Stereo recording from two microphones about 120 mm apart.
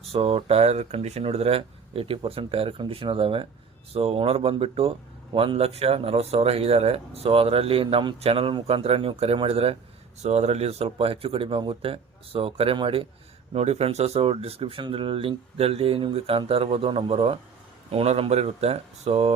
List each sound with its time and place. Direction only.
0.0 s speech: 55° right (ahead or behind)
13.5 s speech: 60° right (ahead or behind)